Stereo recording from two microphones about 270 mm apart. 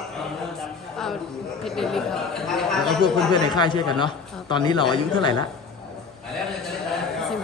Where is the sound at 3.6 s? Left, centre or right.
Centre.